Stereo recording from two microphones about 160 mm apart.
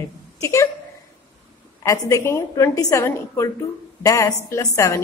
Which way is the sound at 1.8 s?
20° left (ahead or behind).